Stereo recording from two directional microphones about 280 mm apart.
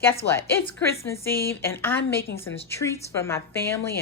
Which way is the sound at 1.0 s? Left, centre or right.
Centre.